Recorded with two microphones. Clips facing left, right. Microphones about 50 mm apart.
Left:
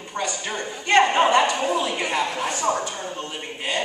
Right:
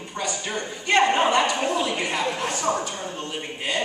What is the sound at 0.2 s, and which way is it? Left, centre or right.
Music, left.